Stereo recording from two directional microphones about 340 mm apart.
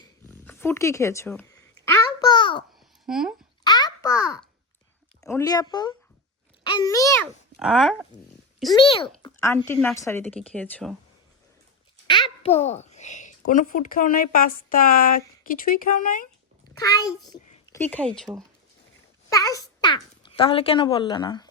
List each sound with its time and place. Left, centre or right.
0.0 s a sound: centre
3.1 s speech: centre
3.6 s a sound: centre
5.2 s a woman's voice: centre
12.4 s a child's voice: centre
16.7 s a child's voice: centre